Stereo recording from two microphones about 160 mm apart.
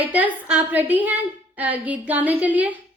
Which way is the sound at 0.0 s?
10° right (ahead or behind).